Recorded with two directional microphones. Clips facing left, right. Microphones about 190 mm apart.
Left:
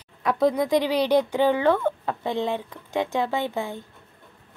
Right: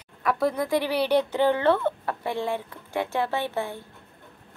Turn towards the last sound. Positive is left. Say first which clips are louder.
# left 1 dB
turn(degrees=15)  # may be behind; listen again after turning